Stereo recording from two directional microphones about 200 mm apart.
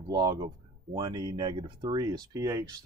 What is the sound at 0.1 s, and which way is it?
Speech, 20° right (ahead or behind).